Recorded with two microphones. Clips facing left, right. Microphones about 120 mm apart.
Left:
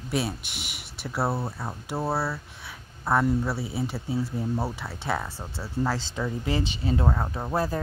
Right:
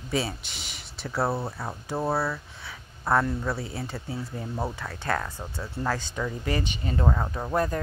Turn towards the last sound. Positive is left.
turn(degrees=5)  # may be behind; listen again after turning